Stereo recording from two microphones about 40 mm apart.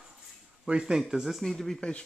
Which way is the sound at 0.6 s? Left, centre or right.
Right.